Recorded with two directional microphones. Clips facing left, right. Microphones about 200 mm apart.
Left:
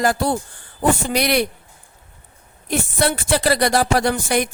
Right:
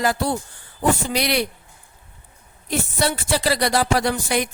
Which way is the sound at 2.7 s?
50° left (ahead or behind).